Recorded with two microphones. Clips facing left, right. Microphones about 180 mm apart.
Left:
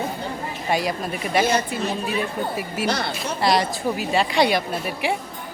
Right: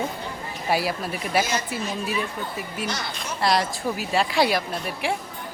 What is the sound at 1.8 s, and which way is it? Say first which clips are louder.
A woman's voice: left 3 dB; 60° left (ahead or behind).